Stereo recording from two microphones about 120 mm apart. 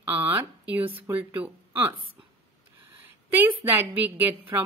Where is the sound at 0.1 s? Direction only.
20° right (ahead or behind).